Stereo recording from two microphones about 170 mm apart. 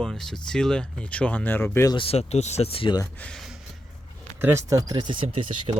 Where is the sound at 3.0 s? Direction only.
5° left (ahead or behind).